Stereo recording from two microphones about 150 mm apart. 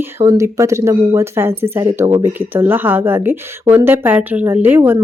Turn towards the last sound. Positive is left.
turn(degrees=-15)  # may be behind; listen again after turning